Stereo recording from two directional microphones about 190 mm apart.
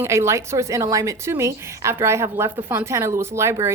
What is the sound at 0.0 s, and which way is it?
A woman's voice, 15° right (ahead or behind).